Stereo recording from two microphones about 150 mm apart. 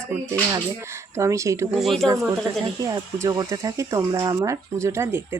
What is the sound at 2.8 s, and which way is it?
Speech, 25° right (ahead or behind).